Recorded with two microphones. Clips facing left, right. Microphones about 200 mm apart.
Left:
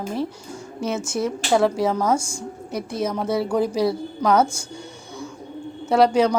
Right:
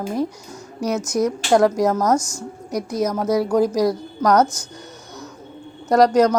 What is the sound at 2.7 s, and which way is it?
Speech, 40° right (ahead or behind).